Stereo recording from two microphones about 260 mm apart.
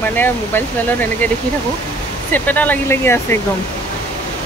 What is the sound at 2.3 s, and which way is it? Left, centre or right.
Speech, centre.